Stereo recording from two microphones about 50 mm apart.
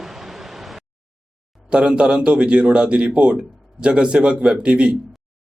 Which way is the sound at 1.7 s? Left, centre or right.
Centre.